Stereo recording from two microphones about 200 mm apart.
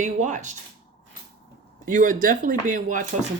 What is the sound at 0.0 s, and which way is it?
Speech, 40° right (ahead or behind).